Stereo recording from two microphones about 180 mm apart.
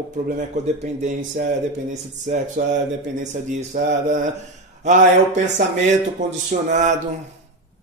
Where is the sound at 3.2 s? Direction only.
40° right (ahead or behind).